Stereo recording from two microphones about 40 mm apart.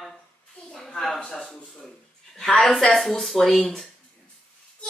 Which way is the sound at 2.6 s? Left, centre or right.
Centre.